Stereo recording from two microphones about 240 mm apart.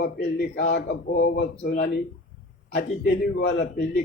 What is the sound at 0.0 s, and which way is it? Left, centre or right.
A man's voice, left.